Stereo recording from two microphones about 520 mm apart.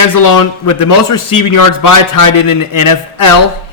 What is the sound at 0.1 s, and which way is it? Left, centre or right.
A man's voice, left.